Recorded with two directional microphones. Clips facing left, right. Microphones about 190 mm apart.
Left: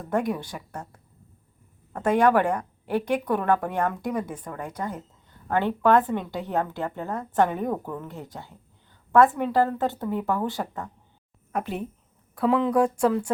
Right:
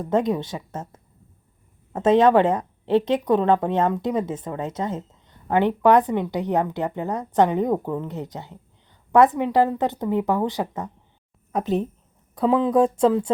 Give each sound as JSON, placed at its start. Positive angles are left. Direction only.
{"t": 0.0, "sound": "a woman's voice", "side_deg": -20}
{"t": 12.3, "sound": "a woman's voice", "side_deg": -20}